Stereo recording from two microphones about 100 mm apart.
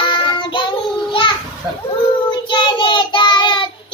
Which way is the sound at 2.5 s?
50° left (ahead or behind).